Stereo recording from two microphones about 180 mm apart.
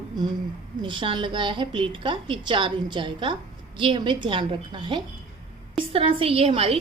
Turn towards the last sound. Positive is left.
turn(degrees=-30)  # may be behind; listen again after turning